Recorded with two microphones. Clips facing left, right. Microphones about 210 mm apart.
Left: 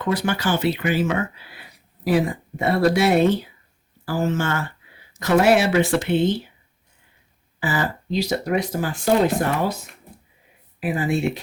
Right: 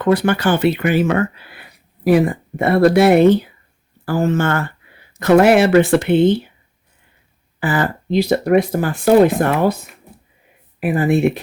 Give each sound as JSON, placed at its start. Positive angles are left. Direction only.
{"t": 0.0, "sound": "speech", "side_deg": -60}
{"t": 7.6, "sound": "speech", "side_deg": -55}
{"t": 10.8, "sound": "speech", "side_deg": -60}